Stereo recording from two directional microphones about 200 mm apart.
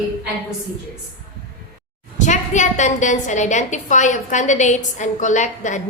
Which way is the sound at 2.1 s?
40° left (ahead or behind).